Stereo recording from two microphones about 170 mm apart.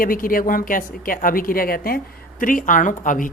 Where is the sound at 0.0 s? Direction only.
55° left (ahead or behind).